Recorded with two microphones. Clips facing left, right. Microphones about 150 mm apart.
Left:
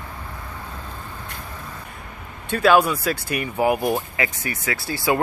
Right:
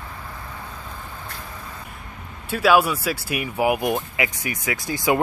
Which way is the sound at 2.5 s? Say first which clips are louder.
Left 1 dB; 5° right (ahead or behind).